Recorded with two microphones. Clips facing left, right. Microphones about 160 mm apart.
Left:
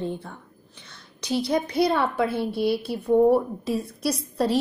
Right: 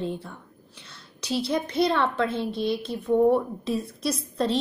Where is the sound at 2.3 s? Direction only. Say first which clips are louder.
Left 2 dB; 20° right (ahead or behind).